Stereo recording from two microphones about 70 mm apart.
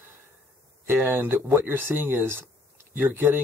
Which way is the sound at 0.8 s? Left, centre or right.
Right.